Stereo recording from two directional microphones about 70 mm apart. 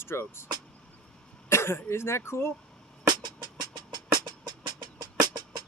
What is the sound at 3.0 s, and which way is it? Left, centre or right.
Music, right.